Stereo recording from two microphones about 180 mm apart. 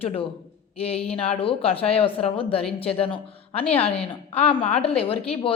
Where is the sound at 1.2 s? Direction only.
30° left (ahead or behind).